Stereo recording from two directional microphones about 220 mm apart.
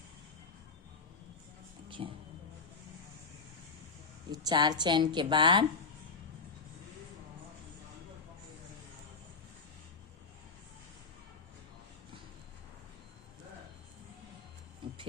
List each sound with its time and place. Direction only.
1.9 s a sound: 25° right (ahead or behind)
4.3 s a woman's voice: 20° right (ahead or behind)
14.8 s music: 20° right (ahead or behind)